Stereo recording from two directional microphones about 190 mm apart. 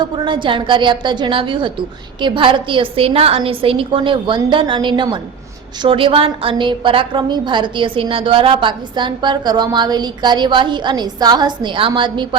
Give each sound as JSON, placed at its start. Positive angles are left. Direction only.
{"t": 0.0, "sound": "a woman's voice", "side_deg": -25}